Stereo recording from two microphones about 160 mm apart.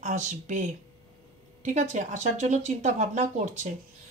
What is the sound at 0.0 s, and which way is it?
Speech, 50° right (ahead or behind).